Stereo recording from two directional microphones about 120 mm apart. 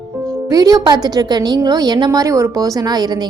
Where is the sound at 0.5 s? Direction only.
30° right (ahead or behind).